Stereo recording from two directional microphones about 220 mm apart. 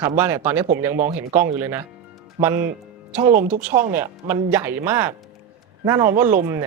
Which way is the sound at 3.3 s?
30° right (ahead or behind).